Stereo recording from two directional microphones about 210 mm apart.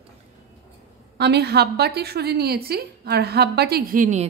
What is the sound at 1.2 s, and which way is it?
A woman's voice, 50° right (ahead or behind).